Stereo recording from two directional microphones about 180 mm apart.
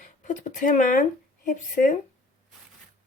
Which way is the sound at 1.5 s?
45° left (ahead or behind).